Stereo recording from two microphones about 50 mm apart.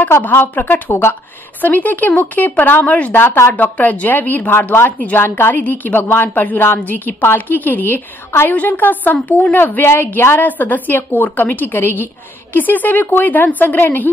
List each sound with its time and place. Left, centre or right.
0.3 s a woman's voice: left
3.2 s speech: left
3.5 s speech: left
4.8 s speech: left
7.1 s speech: left
9.8 s a woman's voice: left